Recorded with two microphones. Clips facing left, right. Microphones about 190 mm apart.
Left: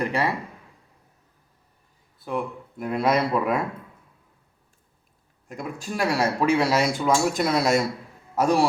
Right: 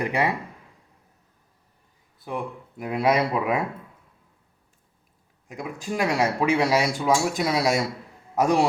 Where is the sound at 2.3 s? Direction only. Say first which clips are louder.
Left 2 dB; 10° right (ahead or behind).